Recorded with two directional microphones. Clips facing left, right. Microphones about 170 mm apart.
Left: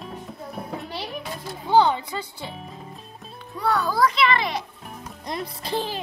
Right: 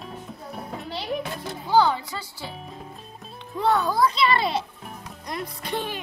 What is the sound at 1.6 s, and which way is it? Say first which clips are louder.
Music: left 2 dB; 20° left (ahead or behind).